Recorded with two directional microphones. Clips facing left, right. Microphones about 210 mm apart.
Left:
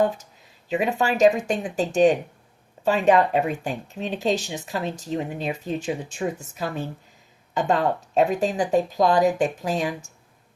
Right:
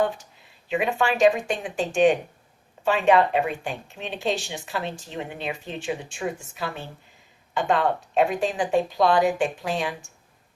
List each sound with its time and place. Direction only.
0.7 s speech: 40° left (ahead or behind)